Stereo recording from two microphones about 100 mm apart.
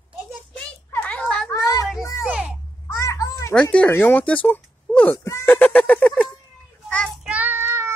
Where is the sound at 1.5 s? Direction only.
35° left (ahead or behind).